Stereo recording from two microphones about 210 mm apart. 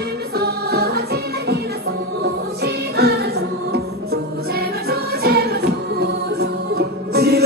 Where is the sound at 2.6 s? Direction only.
50° right (ahead or behind).